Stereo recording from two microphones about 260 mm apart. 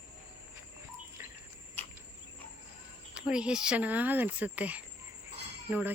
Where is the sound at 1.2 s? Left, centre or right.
Centre.